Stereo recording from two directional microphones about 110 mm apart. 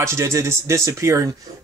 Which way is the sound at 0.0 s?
25° right (ahead or behind).